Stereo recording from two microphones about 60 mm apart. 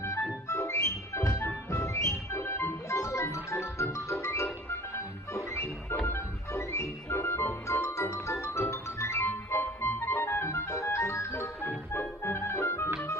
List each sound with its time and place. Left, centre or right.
0.4 s music: left
5.3 s organ: left
8.7 s music: left